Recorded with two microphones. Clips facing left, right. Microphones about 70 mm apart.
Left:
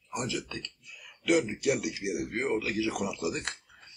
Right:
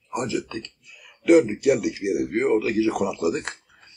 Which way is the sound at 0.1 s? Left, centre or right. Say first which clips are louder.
Right 7 dB; right.